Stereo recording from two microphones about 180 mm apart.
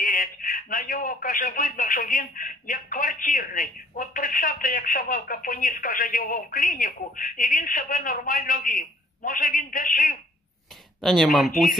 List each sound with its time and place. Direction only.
0.0 s a man's voice: 50° left (ahead or behind)
11.0 s speech: centre (ahead or behind)